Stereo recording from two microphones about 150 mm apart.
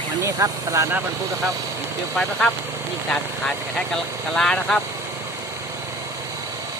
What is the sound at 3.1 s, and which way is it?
Speech, 5° left (ahead or behind).